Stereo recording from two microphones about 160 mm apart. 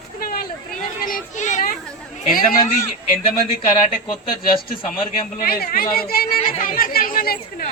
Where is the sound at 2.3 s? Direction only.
60° left (ahead or behind).